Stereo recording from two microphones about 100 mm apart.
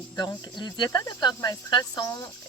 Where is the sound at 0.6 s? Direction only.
45° left (ahead or behind).